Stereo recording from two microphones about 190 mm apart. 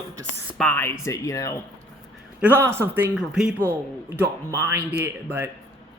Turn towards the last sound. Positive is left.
turn(degrees=-10)  # may be behind; listen again after turning